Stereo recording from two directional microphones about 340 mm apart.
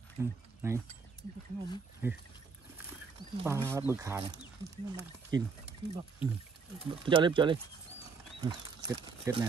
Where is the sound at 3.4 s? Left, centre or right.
Centre.